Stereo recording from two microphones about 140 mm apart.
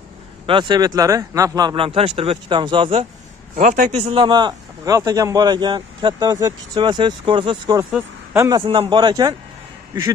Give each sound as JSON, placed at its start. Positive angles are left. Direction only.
{"t": 0.5, "sound": "speech", "side_deg": -35}
{"t": 1.9, "sound": "a man's voice", "side_deg": -45}
{"t": 3.5, "sound": "a man's voice", "side_deg": -65}
{"t": 3.9, "sound": "a man's voice", "side_deg": -40}